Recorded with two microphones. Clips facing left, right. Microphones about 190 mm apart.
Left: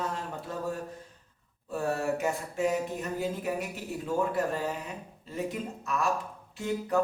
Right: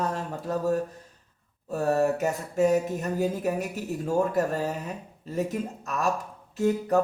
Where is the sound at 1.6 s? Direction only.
40° right (ahead or behind).